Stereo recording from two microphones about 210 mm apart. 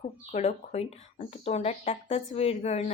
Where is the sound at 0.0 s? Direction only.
35° left (ahead or behind).